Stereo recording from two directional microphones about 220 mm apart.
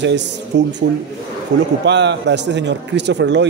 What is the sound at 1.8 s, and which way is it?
Speech, 50° right (ahead or behind).